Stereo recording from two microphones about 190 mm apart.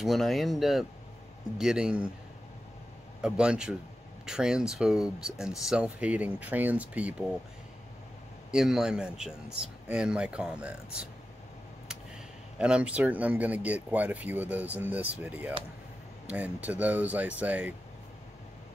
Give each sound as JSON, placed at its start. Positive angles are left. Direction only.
{"t": 0.0, "sound": "speech", "side_deg": 0}
{"t": 3.2, "sound": "speech", "side_deg": -5}
{"t": 8.5, "sound": "speech", "side_deg": -5}
{"t": 12.5, "sound": "speech", "side_deg": -5}